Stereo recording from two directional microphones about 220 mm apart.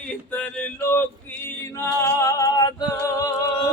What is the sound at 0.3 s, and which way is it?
Male singing, 10° left (ahead or behind).